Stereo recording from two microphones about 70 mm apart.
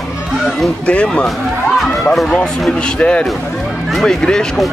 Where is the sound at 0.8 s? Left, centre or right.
Centre.